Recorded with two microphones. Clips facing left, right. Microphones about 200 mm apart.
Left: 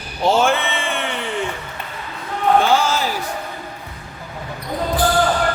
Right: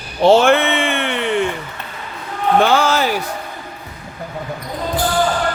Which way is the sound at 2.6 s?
65° right (ahead or behind).